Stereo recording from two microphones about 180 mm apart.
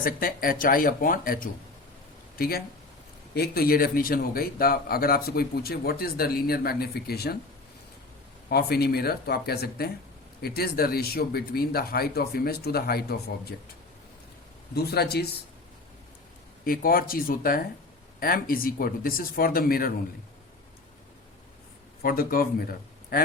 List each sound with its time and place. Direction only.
0.0 s speech: 50° left (ahead or behind)
8.4 s speech: 60° left (ahead or behind)
14.8 s speech: 60° left (ahead or behind)
16.6 s speech: 55° left (ahead or behind)
22.0 s speech: 55° left (ahead or behind)